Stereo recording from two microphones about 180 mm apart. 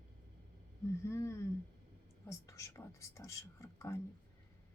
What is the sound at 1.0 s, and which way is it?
Speech, 15° left (ahead or behind).